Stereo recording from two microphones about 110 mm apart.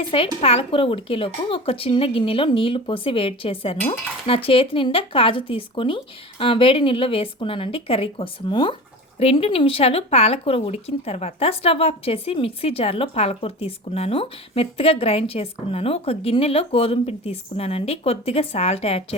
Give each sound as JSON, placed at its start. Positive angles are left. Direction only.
{"t": 0.4, "sound": "speech", "side_deg": 60}
{"t": 9.1, "sound": "speech", "side_deg": 65}